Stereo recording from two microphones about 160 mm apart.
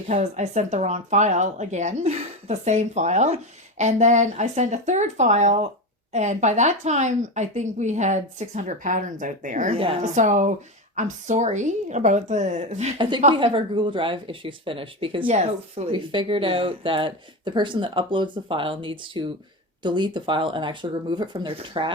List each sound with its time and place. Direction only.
0.1 s speech: 45° right (ahead or behind)
9.7 s speech: 35° right (ahead or behind)
10.0 s speech: 50° right (ahead or behind)
13.0 s a woman's voice: 30° right (ahead or behind)
15.3 s speech: 45° right (ahead or behind)